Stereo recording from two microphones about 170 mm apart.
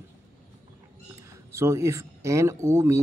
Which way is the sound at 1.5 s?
15° right (ahead or behind).